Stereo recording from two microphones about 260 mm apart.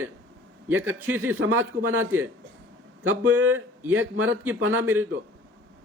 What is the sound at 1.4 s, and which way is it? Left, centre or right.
A man's voice, right.